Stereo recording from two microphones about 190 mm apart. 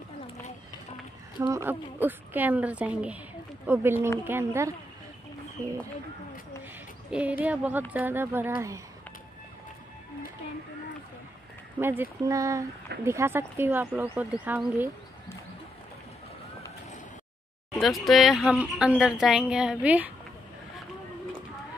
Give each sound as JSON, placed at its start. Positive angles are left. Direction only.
{"t": 1.4, "sound": "speech", "side_deg": -15}
{"t": 7.1, "sound": "speech", "side_deg": -5}
{"t": 11.8, "sound": "speech", "side_deg": -10}
{"t": 17.7, "sound": "speech", "side_deg": 0}